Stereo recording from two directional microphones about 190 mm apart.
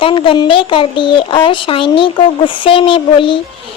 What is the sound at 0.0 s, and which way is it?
Speech, 25° left (ahead or behind).